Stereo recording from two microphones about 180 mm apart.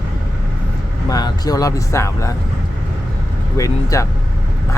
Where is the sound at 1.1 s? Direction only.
20° left (ahead or behind).